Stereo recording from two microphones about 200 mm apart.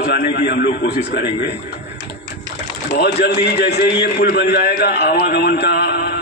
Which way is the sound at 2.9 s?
55° left (ahead or behind).